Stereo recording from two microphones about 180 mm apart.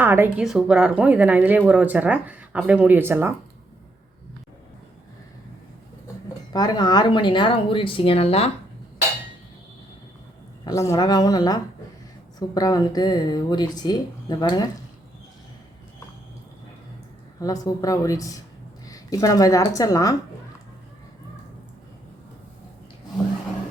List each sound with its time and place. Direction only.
0.0 s a woman's voice: 10° right (ahead or behind)
6.5 s speech: 20° left (ahead or behind)
10.6 s speech: 20° left (ahead or behind)
17.4 s a woman's voice: 20° left (ahead or behind)